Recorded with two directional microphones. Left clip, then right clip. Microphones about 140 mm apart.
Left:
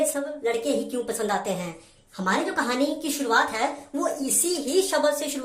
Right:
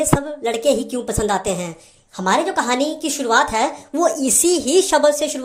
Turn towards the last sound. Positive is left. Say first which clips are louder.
# right 8 dB
turn(degrees=-30)  # may be behind; listen again after turning